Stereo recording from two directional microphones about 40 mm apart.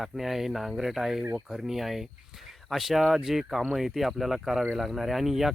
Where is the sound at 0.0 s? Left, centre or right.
Centre.